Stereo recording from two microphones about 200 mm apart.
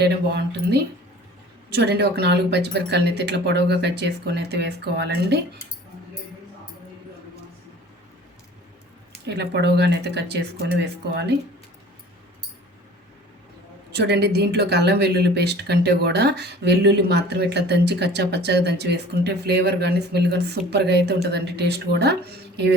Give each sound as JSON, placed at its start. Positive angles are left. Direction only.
{"t": 0.0, "sound": "speech", "side_deg": -55}
{"t": 9.2, "sound": "speech", "side_deg": -55}
{"t": 13.9, "sound": "speech", "side_deg": -55}